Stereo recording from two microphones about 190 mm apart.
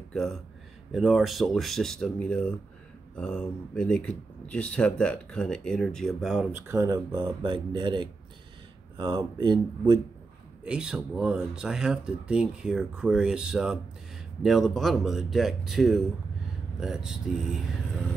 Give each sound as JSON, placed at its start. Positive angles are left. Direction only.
{"t": 0.1, "sound": "speech", "side_deg": 0}
{"t": 6.7, "sound": "speech", "side_deg": -15}
{"t": 10.6, "sound": "speech", "side_deg": -5}